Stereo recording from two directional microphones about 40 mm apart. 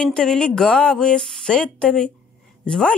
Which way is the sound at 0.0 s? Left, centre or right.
Left.